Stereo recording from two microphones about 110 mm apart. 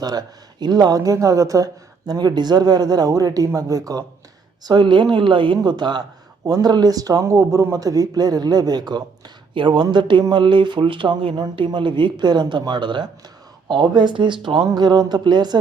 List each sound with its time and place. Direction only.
0.0 s speech: 35° right (ahead or behind)
4.6 s speech: 45° right (ahead or behind)